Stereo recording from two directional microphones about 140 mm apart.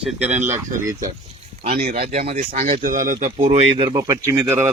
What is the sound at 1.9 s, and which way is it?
Speech, 50° right (ahead or behind).